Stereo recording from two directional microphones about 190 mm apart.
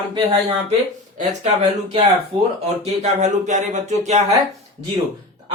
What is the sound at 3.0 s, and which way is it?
Speech, 40° right (ahead or behind).